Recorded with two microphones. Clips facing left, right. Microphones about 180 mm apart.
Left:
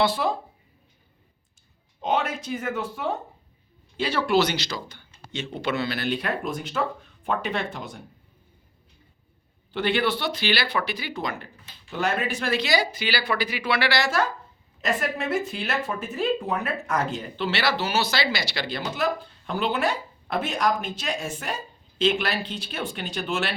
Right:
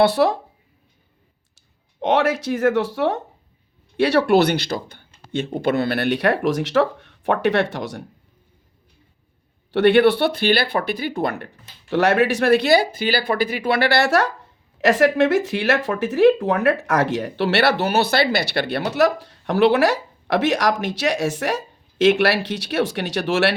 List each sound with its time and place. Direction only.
0.0 s speech: 70° right (ahead or behind)
2.0 s speech: 80° right
3.9 s speech: 70° right (ahead or behind)
9.7 s speech: 65° right (ahead or behind)
14.8 s speech: 85° right